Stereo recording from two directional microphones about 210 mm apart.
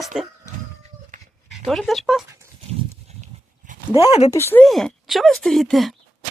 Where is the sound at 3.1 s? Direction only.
35° right (ahead or behind).